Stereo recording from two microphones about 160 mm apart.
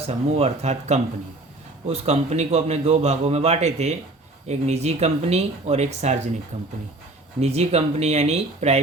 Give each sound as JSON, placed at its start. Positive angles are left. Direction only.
{"t": 0.1, "sound": "a man's voice", "side_deg": -45}
{"t": 7.3, "sound": "speech", "side_deg": -40}